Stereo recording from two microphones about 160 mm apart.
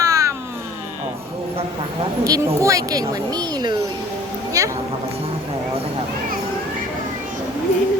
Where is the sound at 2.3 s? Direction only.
20° right (ahead or behind).